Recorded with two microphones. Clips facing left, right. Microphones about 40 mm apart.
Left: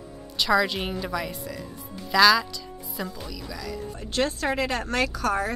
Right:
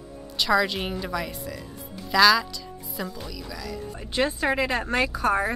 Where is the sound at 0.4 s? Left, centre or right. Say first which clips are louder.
Even; centre.